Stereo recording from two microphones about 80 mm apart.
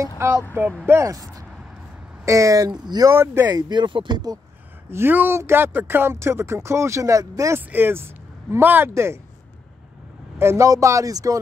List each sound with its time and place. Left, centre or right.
0.2 s speech: right
2.7 s speech: right
3.1 s speech: right
3.5 s speech: right
4.9 s speech: right
7.5 s speech: right
10.4 s speech: right